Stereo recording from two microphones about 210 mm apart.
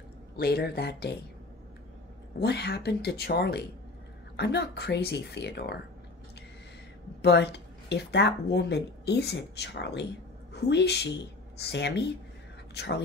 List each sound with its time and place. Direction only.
0.4 s speech: 50° left (ahead or behind)
2.4 s speech: 50° left (ahead or behind)
7.2 s a woman's voice: 55° left (ahead or behind)